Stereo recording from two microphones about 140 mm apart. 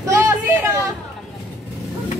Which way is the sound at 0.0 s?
20° right (ahead or behind).